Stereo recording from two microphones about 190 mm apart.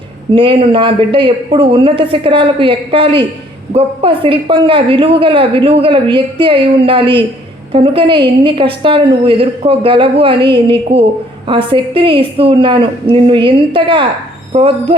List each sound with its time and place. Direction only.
0.3 s a woman's voice: 25° right (ahead or behind)